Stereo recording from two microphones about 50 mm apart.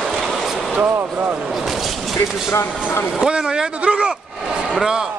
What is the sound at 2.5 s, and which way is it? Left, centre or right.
Speech, left.